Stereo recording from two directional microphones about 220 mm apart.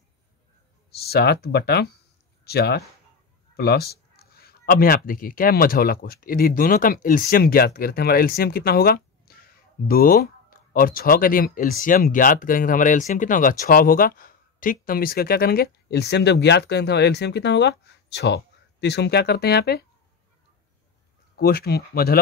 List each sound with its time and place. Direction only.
0.9 s speech: 45° left (ahead or behind)
21.4 s speech: 45° left (ahead or behind)